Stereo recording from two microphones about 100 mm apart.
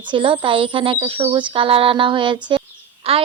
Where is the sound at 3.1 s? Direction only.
70° right (ahead or behind).